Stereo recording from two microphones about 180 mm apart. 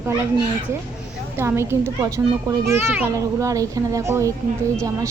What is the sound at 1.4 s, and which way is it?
A woman's voice, 15° right (ahead or behind).